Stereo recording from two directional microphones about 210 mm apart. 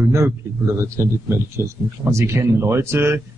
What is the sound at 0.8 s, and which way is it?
A man's voice, 15° right (ahead or behind).